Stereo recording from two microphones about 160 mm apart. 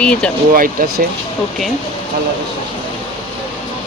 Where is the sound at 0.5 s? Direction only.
60° right (ahead or behind).